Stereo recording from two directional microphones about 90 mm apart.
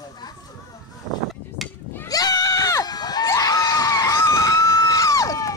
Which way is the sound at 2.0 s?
45° left (ahead or behind).